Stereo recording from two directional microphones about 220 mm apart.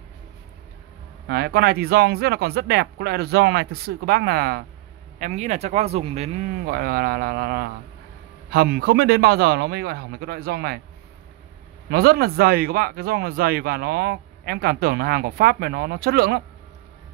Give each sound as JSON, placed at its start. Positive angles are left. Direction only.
{"t": 1.3, "sound": "speech", "side_deg": -45}
{"t": 5.2, "sound": "speech", "side_deg": -35}
{"t": 6.6, "sound": "speech", "side_deg": -45}
{"t": 11.9, "sound": "speech", "side_deg": -45}